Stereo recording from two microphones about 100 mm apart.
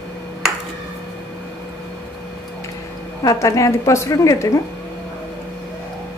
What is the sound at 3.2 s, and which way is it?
A woman's voice, 35° left (ahead or behind).